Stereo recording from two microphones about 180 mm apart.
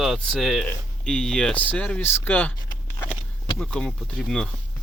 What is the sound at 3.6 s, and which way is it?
Speech, 5° left (ahead or behind).